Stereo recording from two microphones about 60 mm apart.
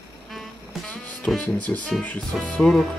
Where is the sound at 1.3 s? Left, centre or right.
Left.